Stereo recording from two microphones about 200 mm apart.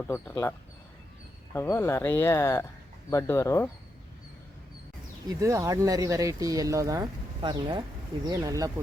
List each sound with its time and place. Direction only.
0.1 s speech: 15° left (ahead or behind)
1.5 s speech: 10° left (ahead or behind)
5.3 s speech: 15° right (ahead or behind)